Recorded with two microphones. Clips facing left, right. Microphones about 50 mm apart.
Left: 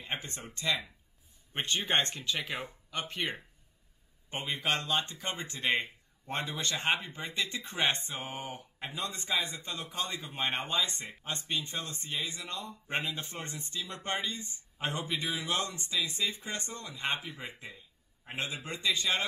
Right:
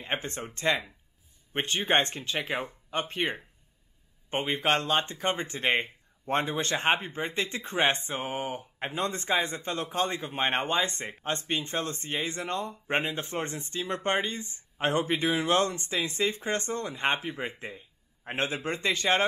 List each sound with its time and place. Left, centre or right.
0.0 s speech: right
1.5 s a man's voice: right